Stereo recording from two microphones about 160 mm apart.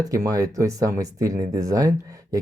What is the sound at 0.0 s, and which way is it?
Speech, 20° right (ahead or behind).